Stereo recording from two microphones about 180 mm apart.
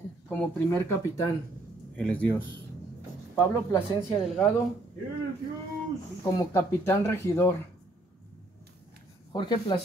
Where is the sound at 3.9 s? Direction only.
Centre (ahead or behind).